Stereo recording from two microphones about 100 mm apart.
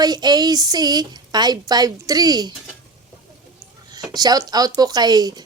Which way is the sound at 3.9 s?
40° right (ahead or behind).